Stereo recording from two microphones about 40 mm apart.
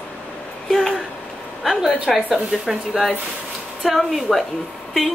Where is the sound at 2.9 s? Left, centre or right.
Centre.